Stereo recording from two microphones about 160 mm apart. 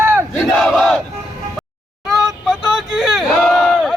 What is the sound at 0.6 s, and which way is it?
Battle cry, centre (ahead or behind).